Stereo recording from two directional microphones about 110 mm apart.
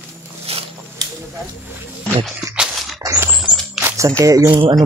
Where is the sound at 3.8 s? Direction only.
30° right (ahead or behind).